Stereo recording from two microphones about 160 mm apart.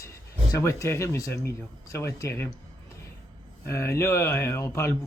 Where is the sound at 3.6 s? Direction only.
15° left (ahead or behind).